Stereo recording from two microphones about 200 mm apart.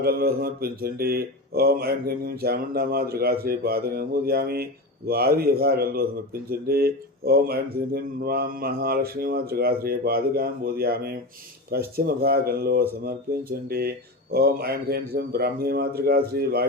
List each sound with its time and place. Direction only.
0.0 s speech: 50° right (ahead or behind)